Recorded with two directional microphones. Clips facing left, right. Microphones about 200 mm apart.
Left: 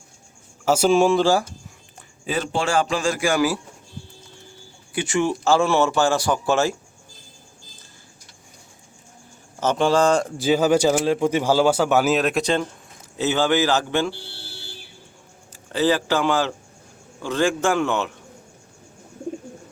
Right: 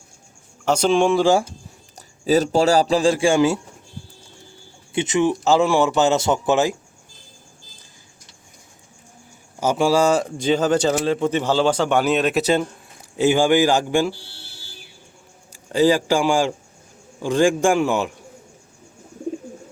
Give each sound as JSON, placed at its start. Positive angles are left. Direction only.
{"t": 0.6, "sound": "speech", "side_deg": 5}
{"t": 1.2, "sound": "speech", "side_deg": -20}
{"t": 2.0, "sound": "a man's voice", "side_deg": -40}
{"t": 4.9, "sound": "speech", "side_deg": -20}
{"t": 9.6, "sound": "a man's voice", "side_deg": -10}
{"t": 15.7, "sound": "a man's voice", "side_deg": -15}